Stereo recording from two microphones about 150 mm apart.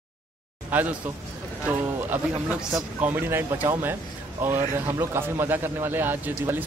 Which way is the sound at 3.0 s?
15° right (ahead or behind).